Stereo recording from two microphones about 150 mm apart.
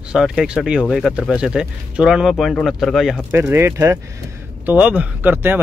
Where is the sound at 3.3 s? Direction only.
15° right (ahead or behind).